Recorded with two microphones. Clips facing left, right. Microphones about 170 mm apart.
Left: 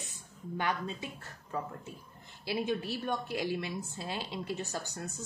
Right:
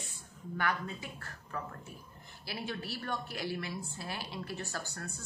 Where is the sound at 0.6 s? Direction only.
20° left (ahead or behind).